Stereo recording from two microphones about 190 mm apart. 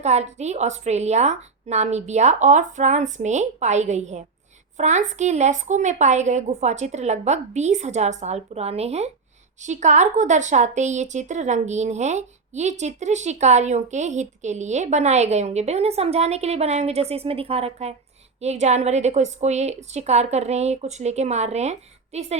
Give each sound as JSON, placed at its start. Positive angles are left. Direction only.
{"t": 0.0, "sound": "speech", "side_deg": -35}